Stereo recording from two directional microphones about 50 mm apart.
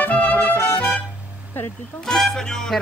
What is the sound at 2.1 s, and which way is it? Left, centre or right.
Speech, centre.